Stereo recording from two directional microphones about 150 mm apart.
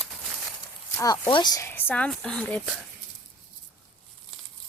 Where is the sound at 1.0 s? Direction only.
20° left (ahead or behind).